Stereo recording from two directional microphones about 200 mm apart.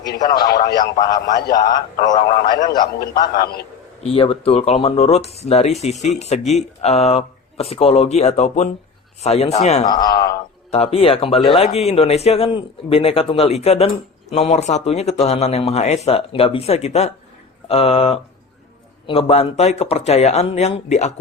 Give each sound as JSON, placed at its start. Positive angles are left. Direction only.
{"t": 0.2, "sound": "a man's voice", "side_deg": 20}
{"t": 3.3, "sound": "a man's voice", "side_deg": 50}
{"t": 4.0, "sound": "speech", "side_deg": 30}
{"t": 9.8, "sound": "a man's voice", "side_deg": 20}
{"t": 10.7, "sound": "a man's voice", "side_deg": 30}